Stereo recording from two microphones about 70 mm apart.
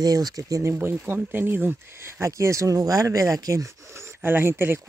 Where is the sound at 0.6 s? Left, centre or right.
Right.